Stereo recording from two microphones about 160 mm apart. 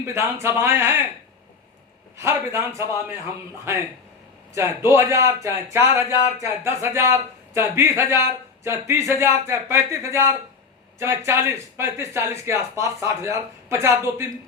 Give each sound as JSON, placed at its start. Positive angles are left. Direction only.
{"t": 0.0, "sound": "speech", "side_deg": -15}
{"t": 2.1, "sound": "speech", "side_deg": -15}
{"t": 4.5, "sound": "speech", "side_deg": -15}